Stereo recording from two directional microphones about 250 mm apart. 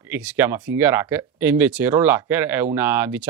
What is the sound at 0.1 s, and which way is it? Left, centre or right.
Speech, centre.